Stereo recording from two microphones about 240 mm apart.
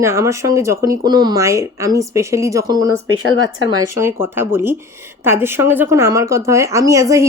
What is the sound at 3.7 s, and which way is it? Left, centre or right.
Speech, centre.